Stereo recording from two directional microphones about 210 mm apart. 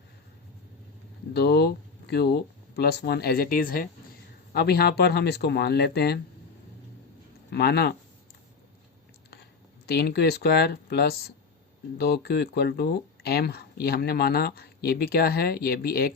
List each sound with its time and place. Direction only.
1.3 s speech: 50° left (ahead or behind)
7.5 s speech: 50° left (ahead or behind)
9.3 s speech: 50° left (ahead or behind)